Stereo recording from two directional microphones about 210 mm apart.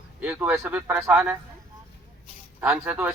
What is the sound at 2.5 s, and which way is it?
Speech, 10° right (ahead or behind).